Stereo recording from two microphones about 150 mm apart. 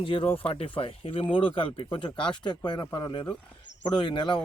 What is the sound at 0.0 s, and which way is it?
Speech, 35° left (ahead or behind).